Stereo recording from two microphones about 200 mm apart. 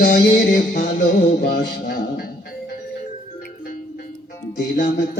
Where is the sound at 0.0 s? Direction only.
45° left (ahead or behind).